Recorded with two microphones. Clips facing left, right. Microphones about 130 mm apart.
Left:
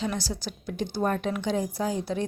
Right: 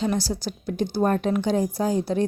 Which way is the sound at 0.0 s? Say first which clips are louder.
Right 6 dB; 35° right (ahead or behind).